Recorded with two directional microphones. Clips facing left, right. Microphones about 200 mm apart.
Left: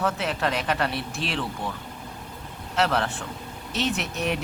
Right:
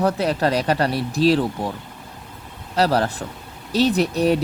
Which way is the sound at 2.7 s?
35° right (ahead or behind).